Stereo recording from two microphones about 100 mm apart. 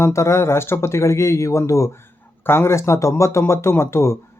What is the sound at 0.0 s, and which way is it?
Speech, 30° left (ahead or behind).